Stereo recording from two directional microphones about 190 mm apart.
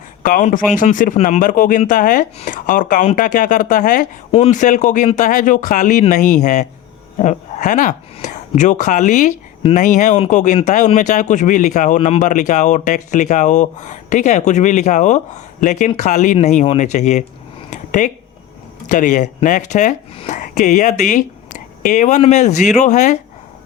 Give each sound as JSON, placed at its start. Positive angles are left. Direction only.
{"t": 0.2, "sound": "speech", "side_deg": 45}
{"t": 17.7, "sound": "a sound", "side_deg": 40}
{"t": 18.9, "sound": "speech", "side_deg": 40}